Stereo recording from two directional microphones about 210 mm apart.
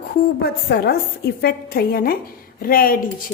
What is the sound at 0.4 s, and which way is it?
A woman's voice, 50° left (ahead or behind).